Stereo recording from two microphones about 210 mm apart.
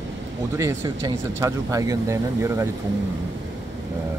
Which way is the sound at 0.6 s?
15° right (ahead or behind).